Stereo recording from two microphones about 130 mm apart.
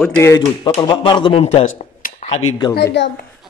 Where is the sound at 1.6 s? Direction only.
70° left (ahead or behind).